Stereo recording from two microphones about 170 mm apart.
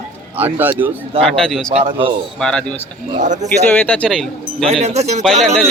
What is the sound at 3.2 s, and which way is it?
Speech, 45° right (ahead or behind).